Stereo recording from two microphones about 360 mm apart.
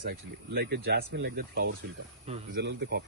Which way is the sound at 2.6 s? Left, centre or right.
Right.